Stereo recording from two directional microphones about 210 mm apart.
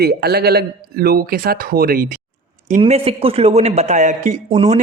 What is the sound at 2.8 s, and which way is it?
Speech, 30° right (ahead or behind).